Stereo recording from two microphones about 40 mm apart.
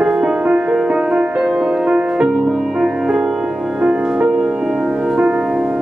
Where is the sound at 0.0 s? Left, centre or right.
Centre.